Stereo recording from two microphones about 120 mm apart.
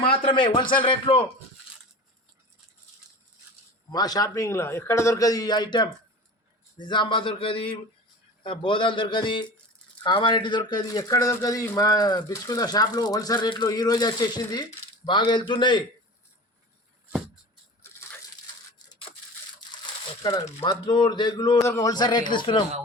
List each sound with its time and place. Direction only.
0.3 s a man's voice: 45° left (ahead or behind)
3.9 s a man's voice: 30° left (ahead or behind)
20.9 s speech: 40° left (ahead or behind)
21.6 s speech: 25° left (ahead or behind); by 22.6 s 45° left (ahead or behind)